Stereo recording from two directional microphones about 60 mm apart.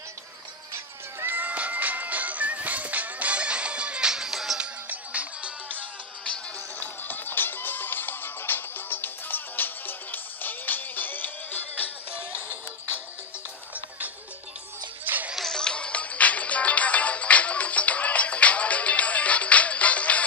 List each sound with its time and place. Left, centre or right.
1.2 s music: right; by 4.6 s centre
4.8 s music: right
6.8 s music: left
12.1 s music: right
15.0 s music: right
15.3 s music: centre; by 20.2 s left